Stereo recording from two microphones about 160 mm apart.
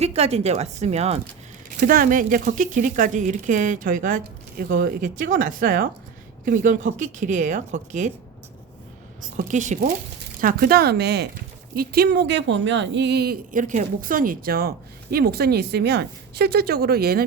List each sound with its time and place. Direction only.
0.0 s speech: 40° right (ahead or behind)
1.8 s a woman's voice: 55° right (ahead or behind)
9.4 s a woman's voice: 50° right (ahead or behind)
10.4 s speech: 65° right (ahead or behind); by 11.3 s 90° right
11.7 s a woman's voice: 70° right (ahead or behind); by 13.3 s 90° right
13.5 s speech: 55° right (ahead or behind); by 14.7 s 70° right (ahead or behind)
15.1 s a woman's voice: 80° right